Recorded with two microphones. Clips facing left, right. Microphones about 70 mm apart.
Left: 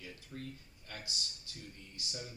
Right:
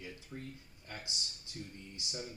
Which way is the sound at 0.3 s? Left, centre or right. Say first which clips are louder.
Left 1 dB; centre.